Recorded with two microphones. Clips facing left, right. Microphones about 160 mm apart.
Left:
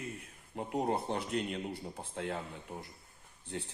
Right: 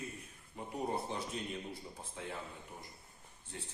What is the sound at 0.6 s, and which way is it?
Speech, 65° left (ahead or behind).